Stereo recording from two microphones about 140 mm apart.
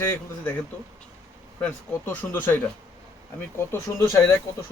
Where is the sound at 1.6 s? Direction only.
15° left (ahead or behind).